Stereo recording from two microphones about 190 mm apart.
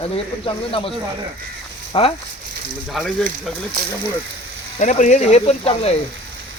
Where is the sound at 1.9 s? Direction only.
30° left (ahead or behind).